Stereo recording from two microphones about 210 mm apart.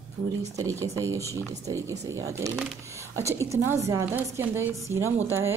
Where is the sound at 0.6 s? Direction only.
15° right (ahead or behind).